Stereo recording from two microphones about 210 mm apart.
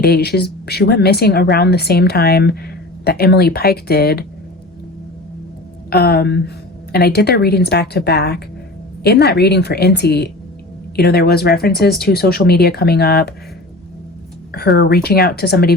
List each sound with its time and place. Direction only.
0.0 s a woman's voice: 50° left (ahead or behind)
5.9 s a woman's voice: 50° left (ahead or behind)
14.5 s a woman's voice: 50° left (ahead or behind)